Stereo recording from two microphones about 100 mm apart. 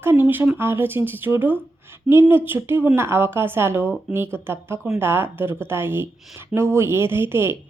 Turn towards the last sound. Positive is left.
turn(degrees=-20)  # may be behind; listen again after turning